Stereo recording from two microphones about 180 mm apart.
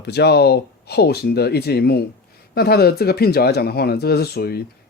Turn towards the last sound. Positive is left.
turn(degrees=60)  # may be behind; listen again after turning